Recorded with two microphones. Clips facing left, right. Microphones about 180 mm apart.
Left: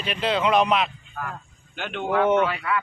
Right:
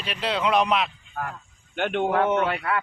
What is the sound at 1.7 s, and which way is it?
Speech, 55° right (ahead or behind).